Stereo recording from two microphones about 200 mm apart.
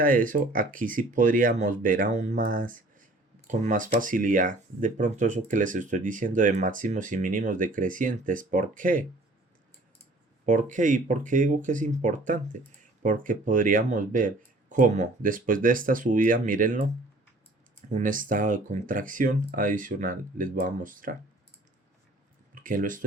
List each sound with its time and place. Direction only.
0.0 s speech: 45° right (ahead or behind)
10.4 s speech: 40° right (ahead or behind)
17.9 s speech: 40° right (ahead or behind)
22.6 s speech: 40° right (ahead or behind)